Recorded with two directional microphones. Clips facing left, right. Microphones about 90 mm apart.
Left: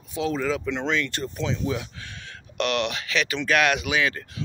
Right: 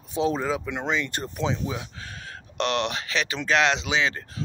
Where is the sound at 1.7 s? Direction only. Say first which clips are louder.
Left 2 dB; 35° right (ahead or behind).